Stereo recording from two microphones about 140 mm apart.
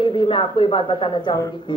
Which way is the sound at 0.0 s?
35° left (ahead or behind).